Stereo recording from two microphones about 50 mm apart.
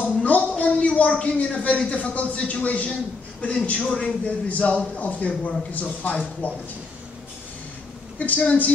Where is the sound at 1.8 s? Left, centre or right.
Left.